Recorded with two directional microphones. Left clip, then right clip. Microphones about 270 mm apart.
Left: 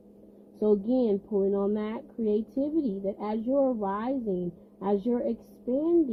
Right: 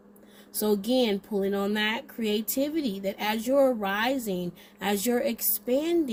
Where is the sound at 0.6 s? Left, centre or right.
Right.